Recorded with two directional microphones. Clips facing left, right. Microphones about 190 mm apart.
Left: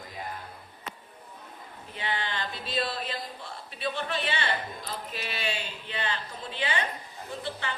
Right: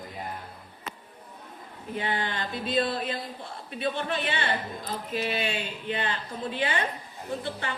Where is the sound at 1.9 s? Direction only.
45° right (ahead or behind).